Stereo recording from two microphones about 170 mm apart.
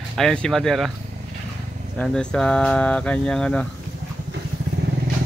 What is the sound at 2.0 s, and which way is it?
Speech, 5° left (ahead or behind).